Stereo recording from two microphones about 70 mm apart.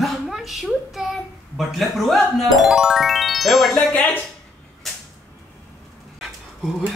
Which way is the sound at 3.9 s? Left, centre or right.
Left.